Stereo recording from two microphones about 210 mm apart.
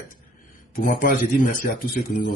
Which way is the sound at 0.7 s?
40° left (ahead or behind).